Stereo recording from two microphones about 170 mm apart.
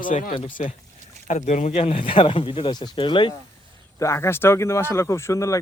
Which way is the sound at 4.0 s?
15° left (ahead or behind).